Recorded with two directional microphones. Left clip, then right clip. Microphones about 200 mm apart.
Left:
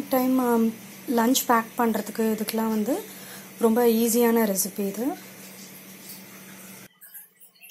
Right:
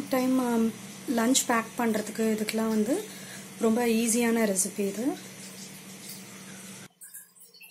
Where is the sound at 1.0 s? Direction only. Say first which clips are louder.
Left 4 dB; 10° left (ahead or behind).